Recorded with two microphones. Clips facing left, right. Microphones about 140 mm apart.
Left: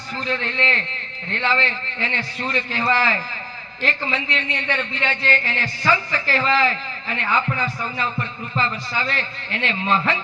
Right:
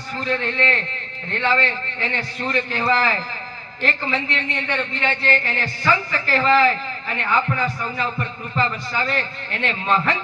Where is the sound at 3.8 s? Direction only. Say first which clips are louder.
Right 1 dB; 45° right (ahead or behind).